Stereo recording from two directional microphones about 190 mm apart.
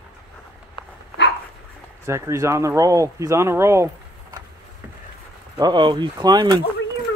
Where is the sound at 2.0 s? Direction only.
15° right (ahead or behind).